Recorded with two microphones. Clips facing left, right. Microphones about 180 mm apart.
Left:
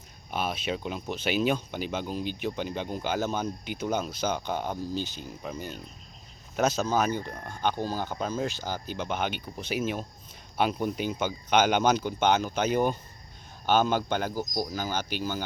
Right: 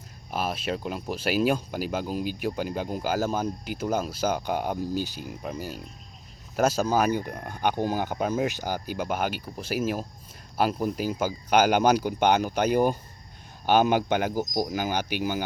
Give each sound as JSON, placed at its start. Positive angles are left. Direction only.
{"t": 0.3, "sound": "speech", "side_deg": -5}